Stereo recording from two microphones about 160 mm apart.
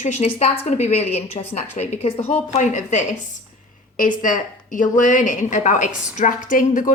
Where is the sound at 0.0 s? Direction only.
45° left (ahead or behind).